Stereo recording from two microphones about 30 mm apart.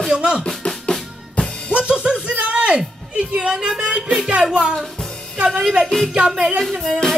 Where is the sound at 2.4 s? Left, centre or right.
Right.